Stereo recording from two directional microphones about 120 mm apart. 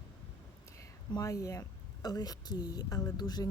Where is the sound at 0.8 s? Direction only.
30° left (ahead or behind).